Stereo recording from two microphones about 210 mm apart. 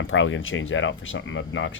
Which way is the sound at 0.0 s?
65° left (ahead or behind).